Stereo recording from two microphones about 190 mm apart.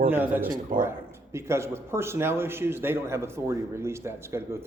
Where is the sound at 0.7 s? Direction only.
45° right (ahead or behind).